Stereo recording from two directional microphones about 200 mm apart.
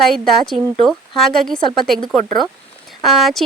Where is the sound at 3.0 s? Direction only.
Centre (ahead or behind).